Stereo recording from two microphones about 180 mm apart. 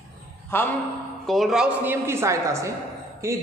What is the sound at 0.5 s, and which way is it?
Speech, 15° left (ahead or behind).